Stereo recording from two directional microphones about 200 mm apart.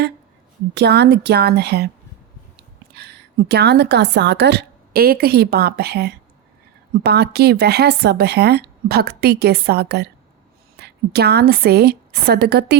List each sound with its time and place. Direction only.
0.7 s speech: 55° right (ahead or behind)
2.9 s a woman's voice: 55° right (ahead or behind)